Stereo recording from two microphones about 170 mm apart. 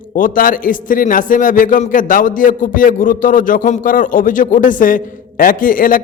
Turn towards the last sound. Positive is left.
turn(degrees=55)  # may be behind; listen again after turning